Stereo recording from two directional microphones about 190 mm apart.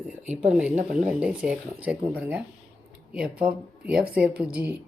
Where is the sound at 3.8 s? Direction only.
5° right (ahead or behind).